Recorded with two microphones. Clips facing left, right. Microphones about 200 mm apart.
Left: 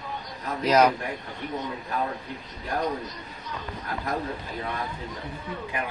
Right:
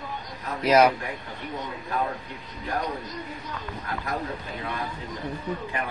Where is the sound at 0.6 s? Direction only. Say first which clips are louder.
Right 1 dB; 10° right (ahead or behind).